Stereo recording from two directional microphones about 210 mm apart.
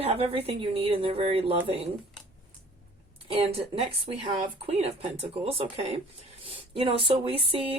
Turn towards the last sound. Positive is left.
turn(degrees=-25)  # may be behind; listen again after turning